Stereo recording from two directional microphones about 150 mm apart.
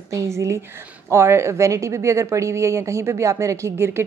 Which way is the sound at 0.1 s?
20° right (ahead or behind).